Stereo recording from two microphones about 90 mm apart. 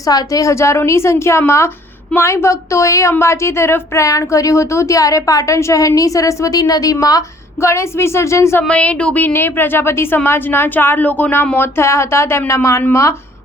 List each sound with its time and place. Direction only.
0.0 s a woman's voice: 45° left (ahead or behind)
8.6 s a woman's voice: 15° left (ahead or behind); by 13.1 s 30° left (ahead or behind)